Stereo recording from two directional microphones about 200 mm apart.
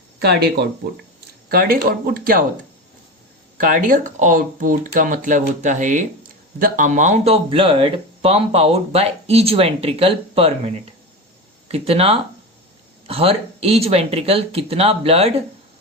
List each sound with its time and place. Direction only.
0.2 s speech: 55° right (ahead or behind)
3.6 s speech: 40° right (ahead or behind)
11.7 s speech: 30° right (ahead or behind)